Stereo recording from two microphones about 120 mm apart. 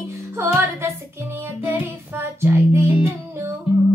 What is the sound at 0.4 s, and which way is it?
Music, 20° right (ahead or behind).